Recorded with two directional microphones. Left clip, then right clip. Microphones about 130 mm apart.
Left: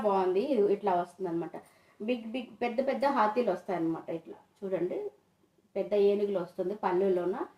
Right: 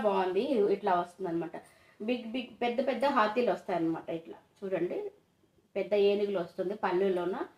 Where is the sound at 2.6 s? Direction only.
25° left (ahead or behind).